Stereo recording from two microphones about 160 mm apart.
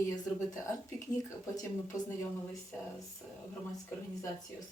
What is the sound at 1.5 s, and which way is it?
Speech, 20° left (ahead or behind).